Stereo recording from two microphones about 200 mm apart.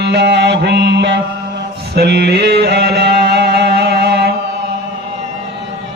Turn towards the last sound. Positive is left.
turn(degrees=-55)  # may be behind; listen again after turning